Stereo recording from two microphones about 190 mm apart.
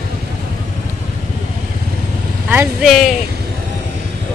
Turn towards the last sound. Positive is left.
turn(degrees=0)  # may be behind; listen again after turning